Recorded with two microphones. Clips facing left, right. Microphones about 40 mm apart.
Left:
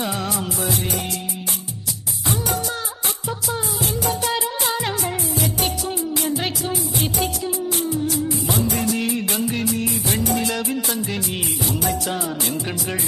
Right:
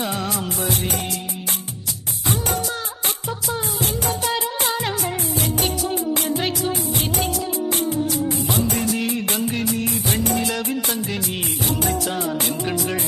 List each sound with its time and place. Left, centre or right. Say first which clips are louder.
0.0 s music of bollywood: even; centre
4.7 s music: left 1 dB; centre
5.9 s music: right 1 dB; right
6.4 s music: right 2 dB; centre
7.7 s music: right 1 dB; right
8.8 s music of bollywood: even; centre
9.8 s music: even; right
12.2 s music: right 2 dB; right